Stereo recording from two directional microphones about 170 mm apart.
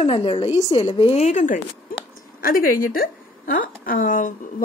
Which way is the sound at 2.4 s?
55° left (ahead or behind).